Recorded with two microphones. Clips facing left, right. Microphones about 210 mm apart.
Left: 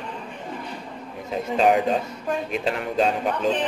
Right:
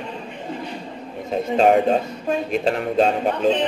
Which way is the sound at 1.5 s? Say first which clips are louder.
Right 3 dB; 50° right (ahead or behind).